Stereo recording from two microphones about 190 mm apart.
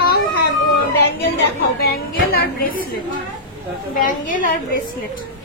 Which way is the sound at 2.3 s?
50° left (ahead or behind).